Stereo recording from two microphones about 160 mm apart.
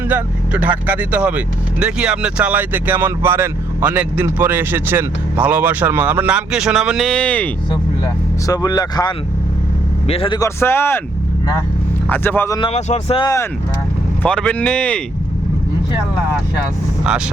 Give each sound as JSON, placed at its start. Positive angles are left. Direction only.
{"t": 0.1, "sound": "speech", "side_deg": -10}
{"t": 8.4, "sound": "speech", "side_deg": 25}
{"t": 10.1, "sound": "speech", "side_deg": 35}
{"t": 10.3, "sound": "speech", "side_deg": 20}
{"t": 12.0, "sound": "speech", "side_deg": 10}
{"t": 12.5, "sound": "speech", "side_deg": 35}
{"t": 13.2, "sound": "speech", "side_deg": 20}
{"t": 14.2, "sound": "speech", "side_deg": 5}
{"t": 17.1, "sound": "speech", "side_deg": -5}